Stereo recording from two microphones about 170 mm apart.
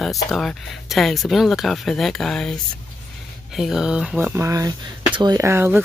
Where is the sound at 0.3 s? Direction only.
Centre (ahead or behind).